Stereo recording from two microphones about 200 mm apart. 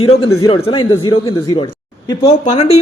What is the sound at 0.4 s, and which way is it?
A man's voice, 25° left (ahead or behind).